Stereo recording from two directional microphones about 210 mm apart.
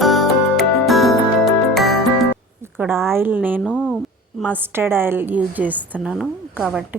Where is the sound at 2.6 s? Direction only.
10° right (ahead or behind).